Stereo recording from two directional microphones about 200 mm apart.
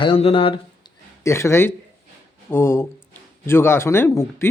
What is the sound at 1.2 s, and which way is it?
Speech, 15° left (ahead or behind).